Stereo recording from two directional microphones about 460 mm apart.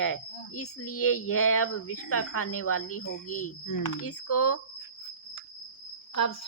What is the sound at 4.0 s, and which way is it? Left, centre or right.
Speech, left.